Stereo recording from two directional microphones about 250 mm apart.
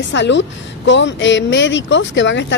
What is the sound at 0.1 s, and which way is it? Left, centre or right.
A woman's voice, left.